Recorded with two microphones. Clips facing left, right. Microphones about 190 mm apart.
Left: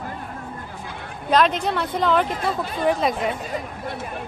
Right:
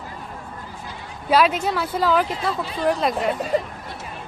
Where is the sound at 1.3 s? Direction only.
5° right (ahead or behind).